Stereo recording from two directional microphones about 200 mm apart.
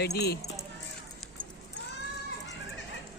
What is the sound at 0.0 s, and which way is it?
Speech, 55° left (ahead or behind).